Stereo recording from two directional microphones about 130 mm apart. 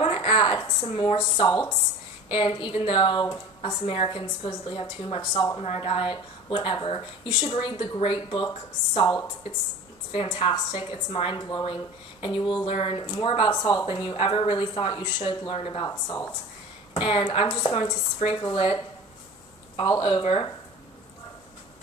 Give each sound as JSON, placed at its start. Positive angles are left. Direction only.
{"t": 0.0, "sound": "a sound", "side_deg": 45}
{"t": 2.2, "sound": "a woman's voice", "side_deg": 40}
{"t": 10.1, "sound": "a woman's voice", "side_deg": 45}
{"t": 15.9, "sound": "speech", "side_deg": 25}
{"t": 16.9, "sound": "a woman's voice", "side_deg": 45}
{"t": 19.8, "sound": "a woman's voice", "side_deg": 40}